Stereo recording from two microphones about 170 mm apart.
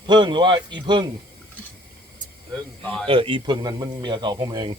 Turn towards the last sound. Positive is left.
turn(degrees=-25)  # may be behind; listen again after turning